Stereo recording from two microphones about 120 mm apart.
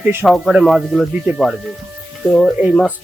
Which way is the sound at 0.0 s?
20° right (ahead or behind).